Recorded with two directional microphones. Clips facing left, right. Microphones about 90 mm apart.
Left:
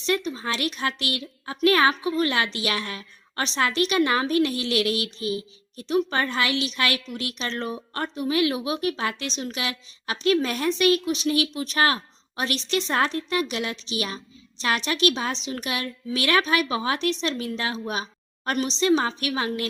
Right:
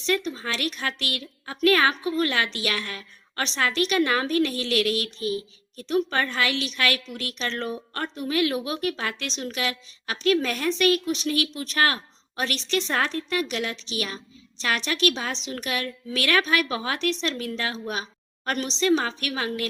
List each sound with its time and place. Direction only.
0.3 s a woman's voice: 20° left (ahead or behind)
4.9 s child singing: 40° right (ahead or behind)
5.9 s a woman's voice: 20° left (ahead or behind)